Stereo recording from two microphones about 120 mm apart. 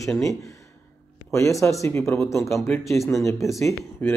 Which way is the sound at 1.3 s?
25° left (ahead or behind).